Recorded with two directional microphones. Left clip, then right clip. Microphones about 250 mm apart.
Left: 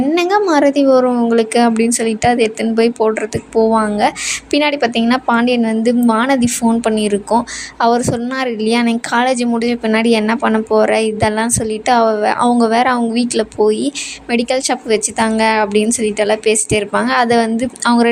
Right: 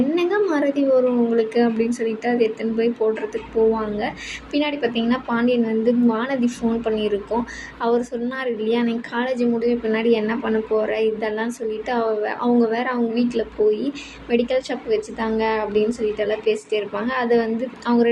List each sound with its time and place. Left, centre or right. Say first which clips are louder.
0.1 s a woman's voice: left 7 dB; left